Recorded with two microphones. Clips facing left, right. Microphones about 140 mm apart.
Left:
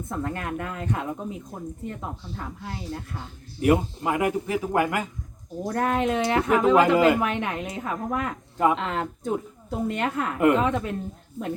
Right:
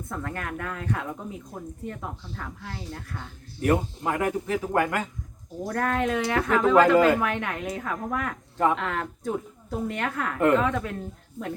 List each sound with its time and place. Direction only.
0.1 s speech: 25° left (ahead or behind)
3.6 s a man's voice: 10° left (ahead or behind)
5.6 s speech: 20° left (ahead or behind)